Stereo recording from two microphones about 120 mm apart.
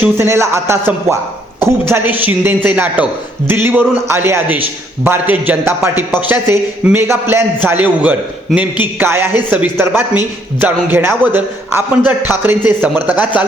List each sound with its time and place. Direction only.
0.0 s a man's voice: 20° right (ahead or behind)